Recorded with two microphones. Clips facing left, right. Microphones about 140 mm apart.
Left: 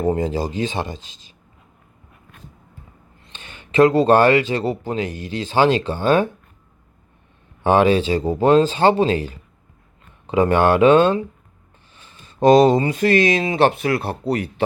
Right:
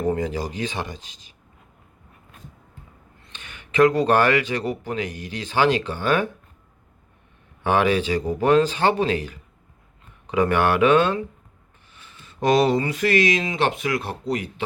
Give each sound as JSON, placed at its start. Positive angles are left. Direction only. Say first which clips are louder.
{"t": 0.0, "sound": "speech", "louder": "left 3 dB", "side_deg": 25}
{"t": 3.2, "sound": "speech", "louder": "left 2 dB", "side_deg": 30}
{"t": 7.6, "sound": "speech", "louder": "left 5 dB", "side_deg": 30}
{"t": 11.9, "sound": "a sound", "louder": "left 6 dB", "side_deg": 35}
{"t": 12.7, "sound": "speech", "louder": "left 4 dB", "side_deg": 25}